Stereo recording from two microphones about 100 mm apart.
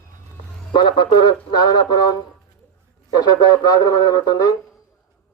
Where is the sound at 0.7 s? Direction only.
50° left (ahead or behind).